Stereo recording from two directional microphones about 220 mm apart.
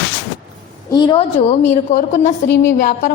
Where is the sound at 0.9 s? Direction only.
20° left (ahead or behind).